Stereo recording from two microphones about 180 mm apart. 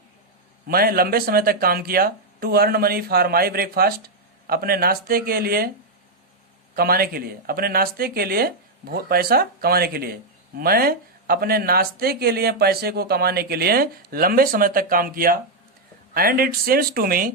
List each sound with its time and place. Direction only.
0.7 s speech: 55° right (ahead or behind)
6.7 s speech: 55° right (ahead or behind)